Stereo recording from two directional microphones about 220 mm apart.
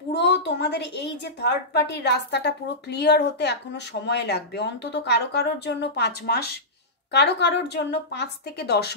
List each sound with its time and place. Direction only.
0.1 s a woman's voice: 50° left (ahead or behind)